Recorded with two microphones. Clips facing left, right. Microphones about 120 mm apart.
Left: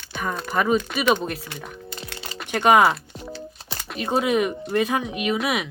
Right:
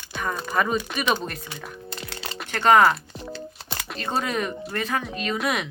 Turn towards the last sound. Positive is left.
turn(degrees=5)  # may be behind; listen again after turning